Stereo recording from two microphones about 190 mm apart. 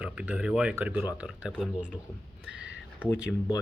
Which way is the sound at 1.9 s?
20° left (ahead or behind).